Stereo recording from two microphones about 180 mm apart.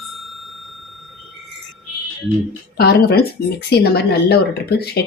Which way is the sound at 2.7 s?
65° left (ahead or behind).